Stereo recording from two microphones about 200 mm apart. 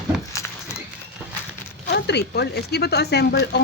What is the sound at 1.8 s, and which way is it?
Speech, 55° left (ahead or behind).